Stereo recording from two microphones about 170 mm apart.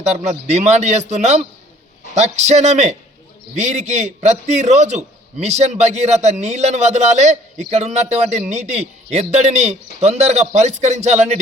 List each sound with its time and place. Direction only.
0.0 s a man's voice: 40° right (ahead or behind)